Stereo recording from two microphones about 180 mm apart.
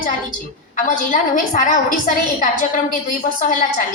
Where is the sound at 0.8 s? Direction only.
45° left (ahead or behind).